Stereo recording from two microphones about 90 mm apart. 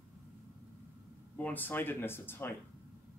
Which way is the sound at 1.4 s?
20° left (ahead or behind).